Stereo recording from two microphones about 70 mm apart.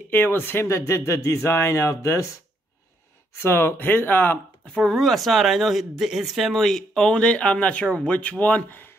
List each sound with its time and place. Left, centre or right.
0.1 s speech: left
3.4 s speech: left
4.7 s speech: centre; by 8.9 s left